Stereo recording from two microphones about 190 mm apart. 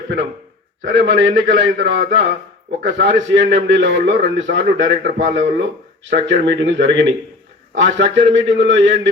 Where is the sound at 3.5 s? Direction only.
70° right (ahead or behind).